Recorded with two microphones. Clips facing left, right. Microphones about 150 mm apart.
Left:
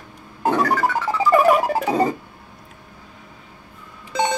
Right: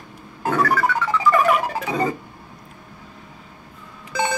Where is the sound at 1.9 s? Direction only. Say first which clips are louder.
Left 4 dB; 35° left (ahead or behind).